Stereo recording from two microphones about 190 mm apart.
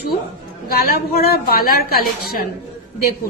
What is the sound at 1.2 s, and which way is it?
A woman's voice, 50° left (ahead or behind).